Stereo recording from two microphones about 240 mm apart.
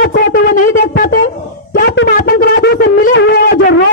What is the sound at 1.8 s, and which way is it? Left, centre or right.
Wind instrument, left.